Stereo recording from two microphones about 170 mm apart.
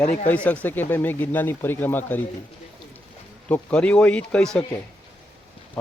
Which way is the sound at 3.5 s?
10° left (ahead or behind).